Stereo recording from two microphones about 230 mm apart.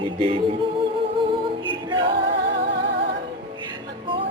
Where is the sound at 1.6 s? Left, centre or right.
Right.